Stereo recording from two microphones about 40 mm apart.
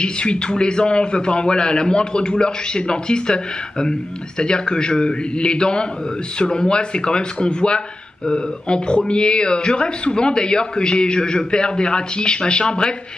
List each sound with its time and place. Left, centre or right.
0.0 s speech: left